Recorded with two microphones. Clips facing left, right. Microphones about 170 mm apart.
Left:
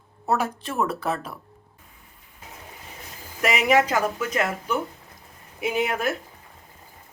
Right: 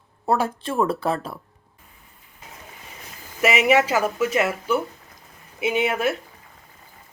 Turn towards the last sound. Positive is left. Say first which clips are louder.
# right 3 dB
turn(degrees=0)  # may be behind; listen again after turning